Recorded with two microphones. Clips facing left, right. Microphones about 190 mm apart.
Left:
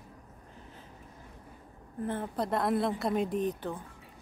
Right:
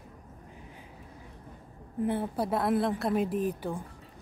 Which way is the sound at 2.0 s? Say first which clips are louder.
Right 3 dB; 10° right (ahead or behind).